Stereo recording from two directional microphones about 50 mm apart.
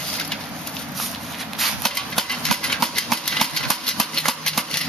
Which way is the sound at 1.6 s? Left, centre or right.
Centre.